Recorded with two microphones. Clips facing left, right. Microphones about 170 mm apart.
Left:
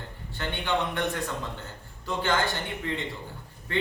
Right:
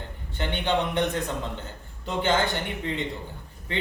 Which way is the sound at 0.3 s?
20° right (ahead or behind).